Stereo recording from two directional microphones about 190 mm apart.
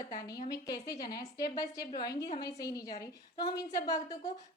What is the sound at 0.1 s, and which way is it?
A woman's voice, 20° left (ahead or behind).